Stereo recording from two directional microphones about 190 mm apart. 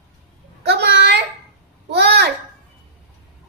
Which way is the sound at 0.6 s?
60° right (ahead or behind).